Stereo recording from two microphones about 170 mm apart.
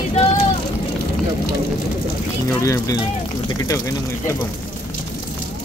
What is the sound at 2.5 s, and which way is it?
Speech, 20° left (ahead or behind).